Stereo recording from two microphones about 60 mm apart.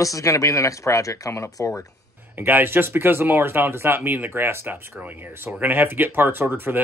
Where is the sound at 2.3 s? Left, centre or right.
Right.